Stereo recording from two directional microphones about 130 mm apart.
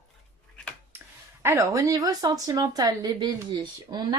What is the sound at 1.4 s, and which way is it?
Speech, 25° right (ahead or behind).